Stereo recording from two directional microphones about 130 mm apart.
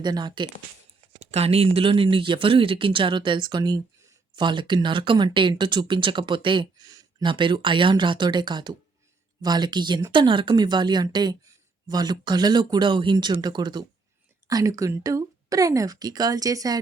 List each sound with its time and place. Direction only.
0.0 s speech: 35° right (ahead or behind)
1.3 s speech: 50° right (ahead or behind); by 13.8 s 35° right (ahead or behind)
14.4 s speech: 25° right (ahead or behind)